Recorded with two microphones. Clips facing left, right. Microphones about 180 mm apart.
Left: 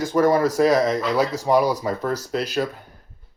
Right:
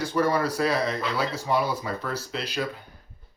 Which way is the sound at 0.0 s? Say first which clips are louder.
Left 6 dB; 45° left (ahead or behind).